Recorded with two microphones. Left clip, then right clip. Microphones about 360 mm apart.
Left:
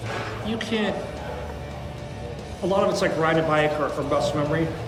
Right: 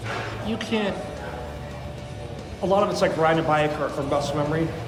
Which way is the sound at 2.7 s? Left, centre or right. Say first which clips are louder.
Right 1 dB; centre.